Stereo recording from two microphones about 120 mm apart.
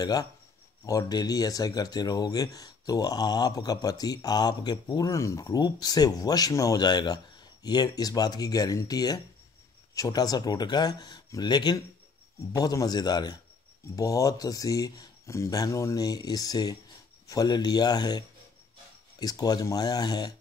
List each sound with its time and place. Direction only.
0.0 s speech: 35° left (ahead or behind)